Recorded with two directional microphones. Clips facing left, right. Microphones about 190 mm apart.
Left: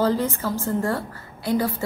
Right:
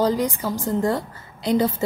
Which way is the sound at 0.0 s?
15° right (ahead or behind).